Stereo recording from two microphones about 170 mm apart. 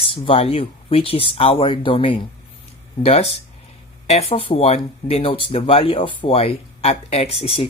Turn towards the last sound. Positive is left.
turn(degrees=35)  # may be behind; listen again after turning